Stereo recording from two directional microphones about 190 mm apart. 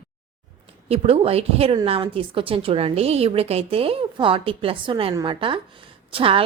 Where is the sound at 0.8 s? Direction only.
30° right (ahead or behind).